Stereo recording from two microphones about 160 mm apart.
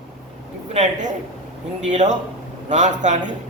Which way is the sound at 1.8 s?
50° right (ahead or behind).